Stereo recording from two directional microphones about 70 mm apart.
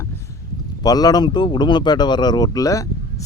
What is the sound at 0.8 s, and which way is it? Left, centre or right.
A man's voice, left.